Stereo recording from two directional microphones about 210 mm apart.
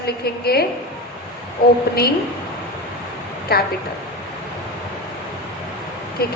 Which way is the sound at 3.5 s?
50° left (ahead or behind).